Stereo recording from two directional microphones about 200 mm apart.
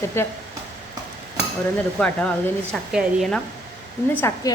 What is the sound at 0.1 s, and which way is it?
Speech, 10° left (ahead or behind).